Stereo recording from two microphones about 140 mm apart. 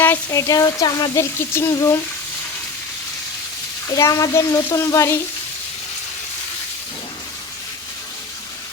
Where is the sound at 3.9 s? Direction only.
20° left (ahead or behind).